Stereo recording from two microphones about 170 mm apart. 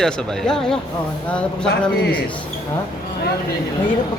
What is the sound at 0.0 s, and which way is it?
Chuckle, 5° left (ahead or behind).